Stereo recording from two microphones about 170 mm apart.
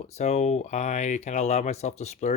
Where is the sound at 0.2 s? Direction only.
40° left (ahead or behind).